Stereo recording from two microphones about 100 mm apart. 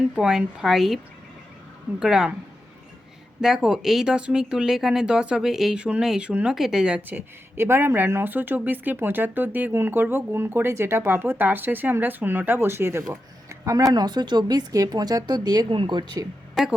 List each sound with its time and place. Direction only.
0.2 s a woman's voice: 5° right (ahead or behind)
2.0 s speech: 5° right (ahead or behind)
3.4 s a woman's voice: 5° right (ahead or behind); by 15.6 s 40° right (ahead or behind)
15.7 s a woman's voice: 50° right (ahead or behind)
16.6 s a woman's voice: centre (ahead or behind)